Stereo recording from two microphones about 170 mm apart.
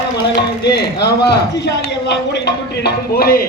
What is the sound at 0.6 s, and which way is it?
A man's voice, 75° left (ahead or behind).